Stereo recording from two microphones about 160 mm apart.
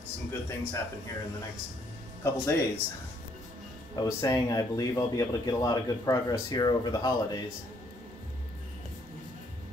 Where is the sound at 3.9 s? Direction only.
25° left (ahead or behind).